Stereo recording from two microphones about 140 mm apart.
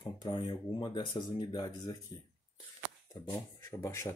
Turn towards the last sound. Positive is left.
turn(degrees=20)  # may be behind; listen again after turning